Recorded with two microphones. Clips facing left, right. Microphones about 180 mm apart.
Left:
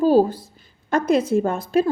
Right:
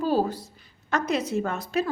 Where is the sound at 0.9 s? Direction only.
50° left (ahead or behind).